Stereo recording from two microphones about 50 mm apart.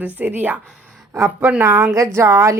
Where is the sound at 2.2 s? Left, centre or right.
Right.